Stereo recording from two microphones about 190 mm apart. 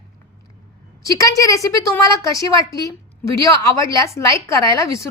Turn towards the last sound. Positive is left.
turn(degrees=15)  # may be behind; listen again after turning